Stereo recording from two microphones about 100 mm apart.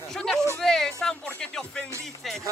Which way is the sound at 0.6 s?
5° left (ahead or behind).